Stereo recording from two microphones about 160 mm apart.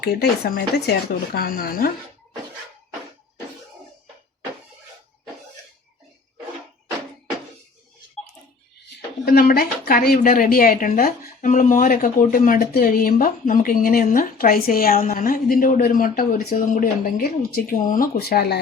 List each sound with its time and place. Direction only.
0.0 s speech: 70° left (ahead or behind)
9.2 s a woman's voice: 65° left (ahead or behind); by 18.6 s 85° left